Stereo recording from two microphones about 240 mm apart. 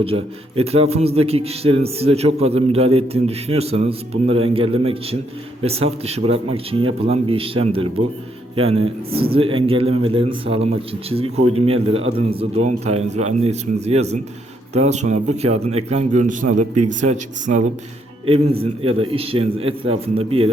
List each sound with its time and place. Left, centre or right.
0.0 s speech: right